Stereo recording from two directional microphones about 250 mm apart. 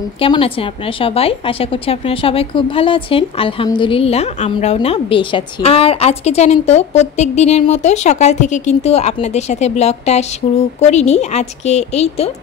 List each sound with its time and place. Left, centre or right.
0.2 s a woman's voice: left